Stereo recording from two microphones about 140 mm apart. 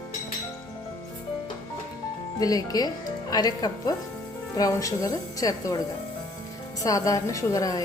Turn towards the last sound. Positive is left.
turn(degrees=25)  # may be behind; listen again after turning